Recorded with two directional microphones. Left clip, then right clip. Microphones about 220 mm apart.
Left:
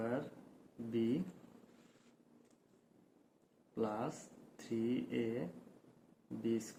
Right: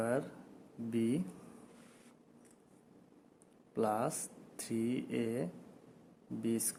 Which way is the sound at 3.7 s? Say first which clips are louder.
Right 6 dB; 50° right (ahead or behind).